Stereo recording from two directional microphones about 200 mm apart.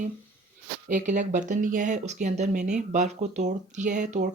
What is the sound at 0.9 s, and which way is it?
Speech, 40° right (ahead or behind).